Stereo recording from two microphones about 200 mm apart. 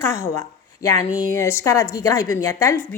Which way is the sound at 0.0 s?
15° left (ahead or behind).